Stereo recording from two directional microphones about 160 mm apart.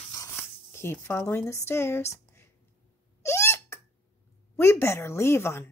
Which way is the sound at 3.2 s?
15° left (ahead or behind).